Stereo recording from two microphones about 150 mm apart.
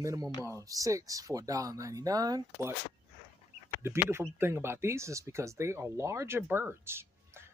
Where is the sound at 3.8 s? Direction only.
15° right (ahead or behind).